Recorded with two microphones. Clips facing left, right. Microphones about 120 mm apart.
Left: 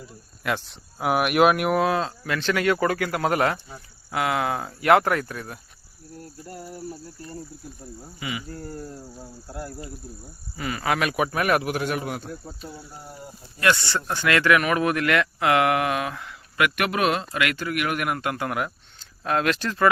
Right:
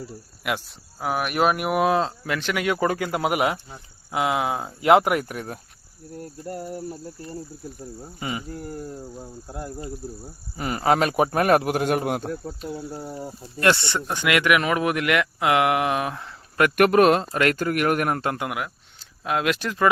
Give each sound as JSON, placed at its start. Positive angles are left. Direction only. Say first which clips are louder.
{"t": 0.4, "sound": "cricket", "louder": "left 1 dB", "side_deg": -10}
{"t": 0.9, "sound": "speech", "louder": "left 4 dB", "side_deg": 10}
{"t": 1.7, "sound": "speech", "louder": "right 2 dB", "side_deg": -20}
{"t": 6.4, "sound": "cricket", "louder": "right 7 dB", "side_deg": -50}
{"t": 8.2, "sound": "a man's voice", "louder": "right 2 dB", "side_deg": -40}
{"t": 8.5, "sound": "cricket", "louder": "right 2 dB", "side_deg": -15}
{"t": 9.5, "sound": "a man's voice", "louder": "right 2 dB", "side_deg": -20}
{"t": 13.8, "sound": "speech", "louder": "even", "side_deg": -20}
{"t": 18.5, "sound": "speech", "louder": "left 2 dB", "side_deg": -5}